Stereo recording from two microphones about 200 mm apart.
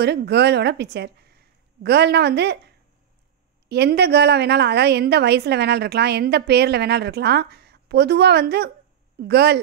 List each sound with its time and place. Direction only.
0.0 s a woman's voice: 55° right (ahead or behind)
3.6 s a woman's voice: 55° right (ahead or behind)